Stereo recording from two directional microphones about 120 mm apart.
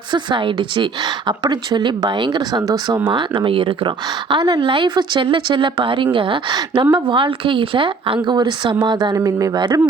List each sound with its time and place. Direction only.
0.1 s speech: 40° right (ahead or behind)
3.1 s speech: 40° right (ahead or behind)